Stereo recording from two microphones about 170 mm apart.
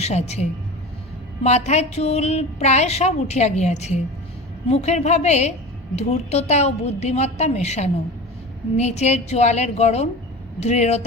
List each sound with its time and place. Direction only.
0.0 s a woman's voice: 40° left (ahead or behind)
1.5 s a woman's voice: 40° left (ahead or behind)